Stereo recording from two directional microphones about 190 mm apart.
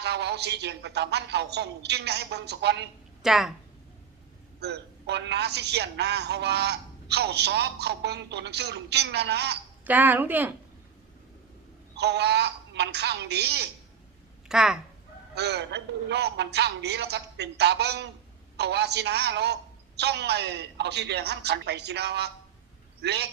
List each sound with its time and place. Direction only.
0.0 s a woman's voice: 60° right (ahead or behind)
3.2 s a woman's voice: centre (ahead or behind)
4.6 s a woman's voice: 60° right (ahead or behind)
9.8 s speech: 10° right (ahead or behind)
11.9 s a woman's voice: 60° right (ahead or behind)
14.4 s speech: 5° right (ahead or behind)
15.4 s a woman's voice: 60° right (ahead or behind)